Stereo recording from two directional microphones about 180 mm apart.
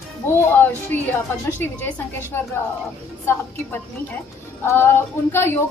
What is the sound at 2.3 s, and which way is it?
A woman's voice, 15° left (ahead or behind).